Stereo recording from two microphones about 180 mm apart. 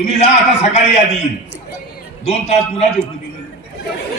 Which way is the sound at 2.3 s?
35° left (ahead or behind).